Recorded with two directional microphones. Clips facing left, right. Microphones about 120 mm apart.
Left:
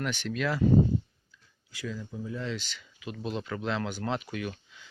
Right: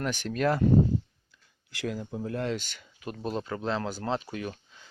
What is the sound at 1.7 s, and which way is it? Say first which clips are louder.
Speech: right 4 dB; 75° right (ahead or behind).